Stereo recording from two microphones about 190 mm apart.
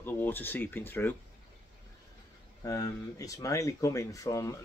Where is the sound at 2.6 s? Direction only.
15° left (ahead or behind).